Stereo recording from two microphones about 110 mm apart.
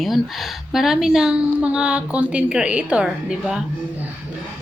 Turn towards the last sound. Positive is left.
turn(degrees=-5)  # may be behind; listen again after turning